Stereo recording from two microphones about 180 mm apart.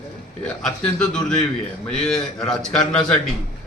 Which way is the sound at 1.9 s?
5° left (ahead or behind).